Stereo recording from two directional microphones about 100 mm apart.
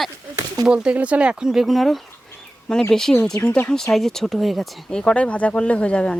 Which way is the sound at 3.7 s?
5° left (ahead or behind).